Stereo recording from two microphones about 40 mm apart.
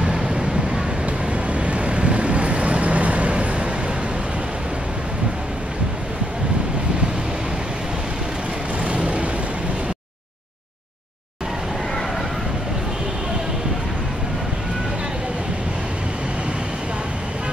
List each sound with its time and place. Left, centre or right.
0.0 s vehicle: right
1.5 s vehicle: right
8.8 s vehicle: right